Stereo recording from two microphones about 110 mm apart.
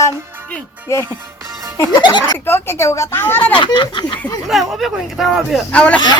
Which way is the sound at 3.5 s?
45° left (ahead or behind).